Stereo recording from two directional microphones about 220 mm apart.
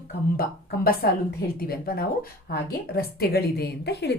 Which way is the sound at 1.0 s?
45° left (ahead or behind).